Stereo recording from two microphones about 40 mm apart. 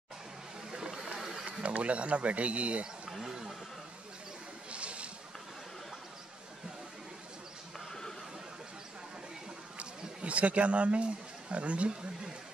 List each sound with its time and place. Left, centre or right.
0.7 s a sound: centre
1.6 s speech: right
3.1 s speech: centre
4.6 s boat: right
9.8 s speech: right